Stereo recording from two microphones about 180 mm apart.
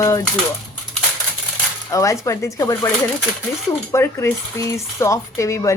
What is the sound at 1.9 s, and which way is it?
Speech, 15° left (ahead or behind).